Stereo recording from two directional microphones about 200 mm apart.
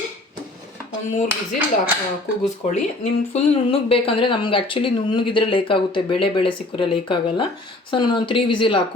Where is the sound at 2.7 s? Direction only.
35° left (ahead or behind).